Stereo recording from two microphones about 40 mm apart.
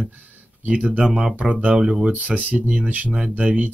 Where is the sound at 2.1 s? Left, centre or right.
Right.